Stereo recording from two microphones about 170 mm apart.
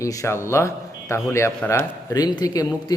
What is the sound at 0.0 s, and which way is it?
A man's voice, 20° left (ahead or behind).